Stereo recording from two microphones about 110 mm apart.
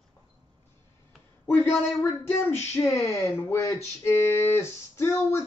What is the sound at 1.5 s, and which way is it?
Speech, 20° left (ahead or behind).